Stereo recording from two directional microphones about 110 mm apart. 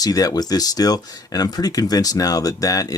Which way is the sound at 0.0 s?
35° left (ahead or behind).